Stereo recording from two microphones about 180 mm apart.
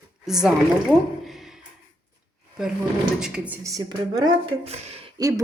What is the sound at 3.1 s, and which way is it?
A woman's voice, 5° right (ahead or behind).